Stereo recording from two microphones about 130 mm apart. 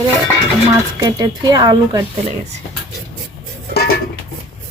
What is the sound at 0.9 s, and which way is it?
Speech, 30° right (ahead or behind).